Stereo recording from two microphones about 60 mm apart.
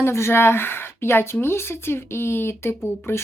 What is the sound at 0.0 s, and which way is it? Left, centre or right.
A woman's voice, left.